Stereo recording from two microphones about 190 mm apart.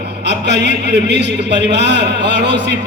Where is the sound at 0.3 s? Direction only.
65° right (ahead or behind).